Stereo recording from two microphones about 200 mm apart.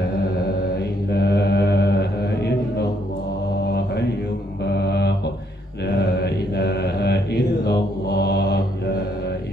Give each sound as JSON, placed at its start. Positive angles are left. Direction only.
{"t": 1.1, "sound": "mantra", "side_deg": 55}
{"t": 4.6, "sound": "mantra", "side_deg": 55}
{"t": 6.2, "sound": "mantra", "side_deg": 55}